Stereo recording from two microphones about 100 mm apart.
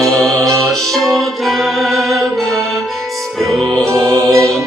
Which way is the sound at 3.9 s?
30° right (ahead or behind).